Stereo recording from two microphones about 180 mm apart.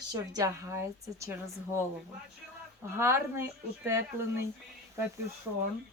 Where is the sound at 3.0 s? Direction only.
15° right (ahead or behind).